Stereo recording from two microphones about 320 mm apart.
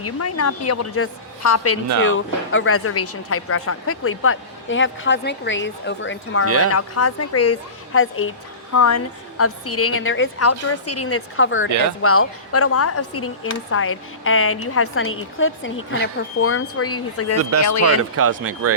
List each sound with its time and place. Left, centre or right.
0.0 s a woman's voice: left
2.0 s a woman's voice: left
6.7 s a woman's voice: left
8.7 s a woman's voice: left
18.2 s speech: right